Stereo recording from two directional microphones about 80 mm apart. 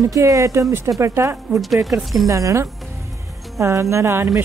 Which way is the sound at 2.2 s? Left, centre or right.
Right.